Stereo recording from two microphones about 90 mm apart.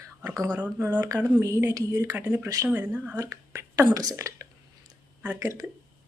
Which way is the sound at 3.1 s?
35° right (ahead or behind).